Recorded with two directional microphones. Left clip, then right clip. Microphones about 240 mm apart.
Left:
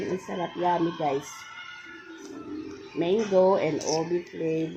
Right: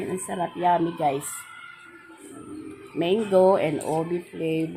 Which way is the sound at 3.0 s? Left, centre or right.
Right.